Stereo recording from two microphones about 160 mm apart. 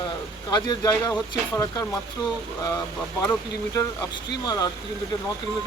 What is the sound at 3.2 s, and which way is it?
Speech, 20° left (ahead or behind).